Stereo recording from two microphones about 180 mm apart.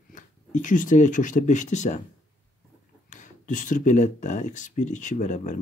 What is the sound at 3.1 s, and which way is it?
Speech, 45° left (ahead or behind).